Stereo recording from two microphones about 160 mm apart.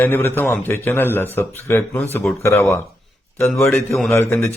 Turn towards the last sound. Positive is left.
turn(degrees=15)  # may be behind; listen again after turning